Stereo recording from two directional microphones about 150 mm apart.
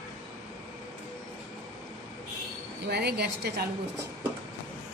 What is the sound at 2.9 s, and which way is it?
Speech, 90° right.